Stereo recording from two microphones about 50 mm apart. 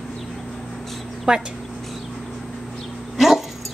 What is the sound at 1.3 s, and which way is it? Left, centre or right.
Speech, centre.